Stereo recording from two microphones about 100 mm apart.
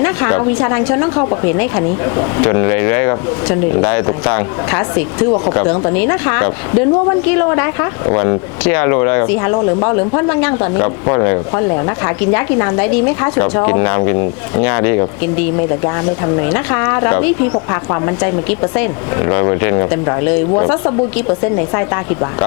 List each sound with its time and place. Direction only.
0.0 s a woman's voice: 25° left (ahead or behind)